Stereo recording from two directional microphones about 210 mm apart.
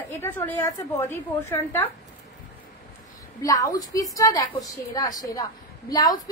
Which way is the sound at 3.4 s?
15° left (ahead or behind).